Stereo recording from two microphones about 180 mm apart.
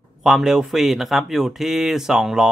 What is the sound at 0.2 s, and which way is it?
Speech, centre (ahead or behind).